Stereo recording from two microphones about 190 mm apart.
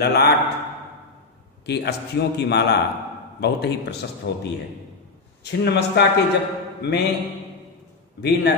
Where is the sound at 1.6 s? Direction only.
60° left (ahead or behind).